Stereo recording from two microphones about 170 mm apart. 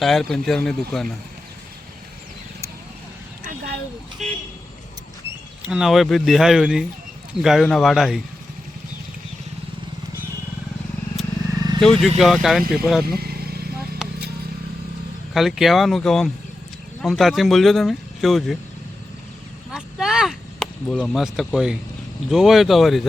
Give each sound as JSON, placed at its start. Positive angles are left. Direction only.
{"t": 0.0, "sound": "speech", "side_deg": 0}
{"t": 4.2, "sound": "vehicle", "side_deg": 0}
{"t": 5.6, "sound": "speech", "side_deg": -5}
{"t": 11.8, "sound": "speech", "side_deg": 0}
{"t": 13.1, "sound": "vehicle", "side_deg": -65}
{"t": 15.3, "sound": "speech", "side_deg": 0}
{"t": 19.7, "sound": "a sound", "side_deg": -5}
{"t": 22.3, "sound": "speech", "side_deg": 0}